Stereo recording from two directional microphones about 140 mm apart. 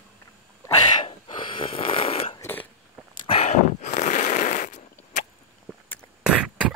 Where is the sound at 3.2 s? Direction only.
45° left (ahead or behind).